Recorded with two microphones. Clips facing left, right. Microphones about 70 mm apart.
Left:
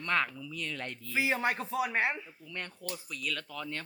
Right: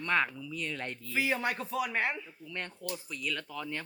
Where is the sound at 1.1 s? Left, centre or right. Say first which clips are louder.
Left 1 dB; centre.